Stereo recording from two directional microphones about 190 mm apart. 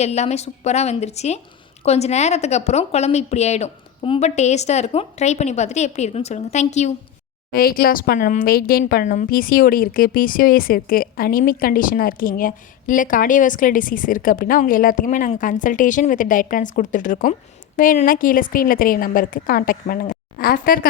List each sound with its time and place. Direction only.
0.0 s a woman's voice: 35° left (ahead or behind)
7.5 s a woman's voice: 50° left (ahead or behind)